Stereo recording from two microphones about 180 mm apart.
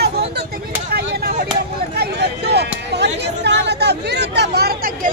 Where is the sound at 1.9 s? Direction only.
65° right (ahead or behind).